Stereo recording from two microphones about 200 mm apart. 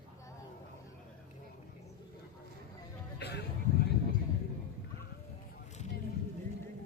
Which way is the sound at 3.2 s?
55° left (ahead or behind).